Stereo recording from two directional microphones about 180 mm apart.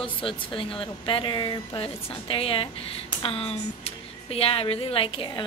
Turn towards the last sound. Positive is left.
turn(degrees=30)  # may be behind; listen again after turning